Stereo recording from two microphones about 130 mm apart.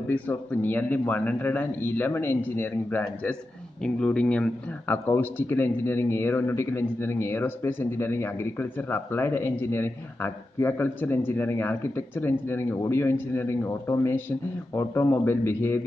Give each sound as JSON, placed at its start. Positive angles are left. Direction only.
{"t": 0.1, "sound": "speech", "side_deg": 15}
{"t": 4.9, "sound": "a man's voice", "side_deg": 20}